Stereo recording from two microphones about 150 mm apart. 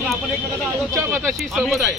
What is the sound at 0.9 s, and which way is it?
Speech, 20° right (ahead or behind).